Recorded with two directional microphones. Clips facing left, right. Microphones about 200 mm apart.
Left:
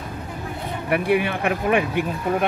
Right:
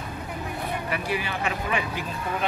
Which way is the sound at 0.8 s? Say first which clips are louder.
Left 13 dB; 60° left (ahead or behind).